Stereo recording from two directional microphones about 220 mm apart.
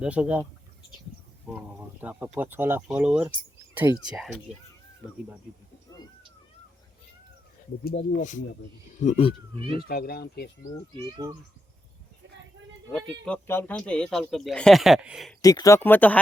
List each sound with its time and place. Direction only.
0.0 s speech: 5° right (ahead or behind)
1.5 s speech: 5° right (ahead or behind)
7.9 s speech: 50° left (ahead or behind)
9.0 s speech: 30° left (ahead or behind)
9.8 s speech: 45° left (ahead or behind)
11.0 s speech: 15° right (ahead or behind)
12.9 s speech: centre (ahead or behind)
15.4 s speech: 15° left (ahead or behind)